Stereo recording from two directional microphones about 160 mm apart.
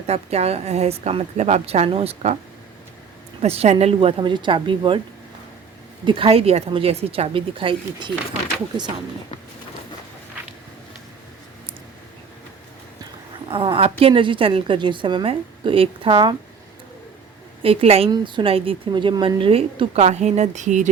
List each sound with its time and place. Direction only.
0.1 s a woman's voice: 40° right (ahead or behind)
3.4 s a woman's voice: 40° right (ahead or behind)
4.2 s a woman's voice: 30° right (ahead or behind)
6.1 s a woman's voice: 35° right (ahead or behind)
13.5 s a woman's voice: 35° right (ahead or behind)
17.6 s a woman's voice: 35° right (ahead or behind)